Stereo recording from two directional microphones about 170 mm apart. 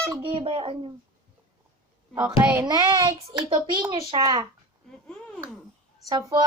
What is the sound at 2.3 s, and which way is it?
A woman's voice, 15° right (ahead or behind).